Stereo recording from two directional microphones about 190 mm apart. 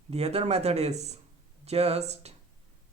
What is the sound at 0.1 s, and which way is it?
Speech, 35° right (ahead or behind).